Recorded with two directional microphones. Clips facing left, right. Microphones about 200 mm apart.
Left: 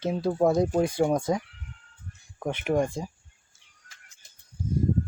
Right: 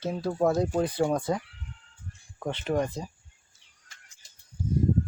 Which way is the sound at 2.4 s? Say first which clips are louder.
Left 2 dB; 10° left (ahead or behind).